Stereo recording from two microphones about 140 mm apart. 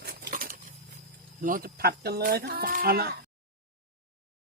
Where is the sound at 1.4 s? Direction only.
85° right.